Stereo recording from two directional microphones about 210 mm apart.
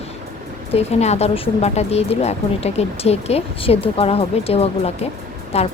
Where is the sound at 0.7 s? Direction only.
30° left (ahead or behind).